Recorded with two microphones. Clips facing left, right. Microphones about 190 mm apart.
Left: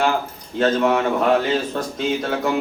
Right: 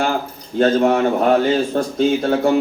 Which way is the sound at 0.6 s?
40° right (ahead or behind).